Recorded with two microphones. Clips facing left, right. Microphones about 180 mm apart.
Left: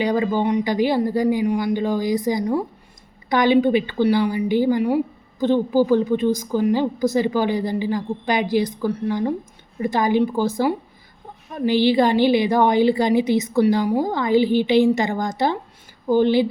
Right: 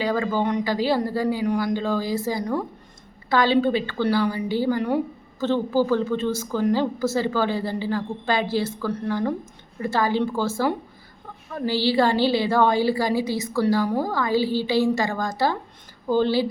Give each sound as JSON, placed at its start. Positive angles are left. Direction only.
{"t": 0.0, "sound": "a woman's voice", "side_deg": 20}